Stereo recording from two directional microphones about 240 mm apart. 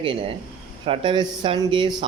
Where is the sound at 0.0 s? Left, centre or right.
Right.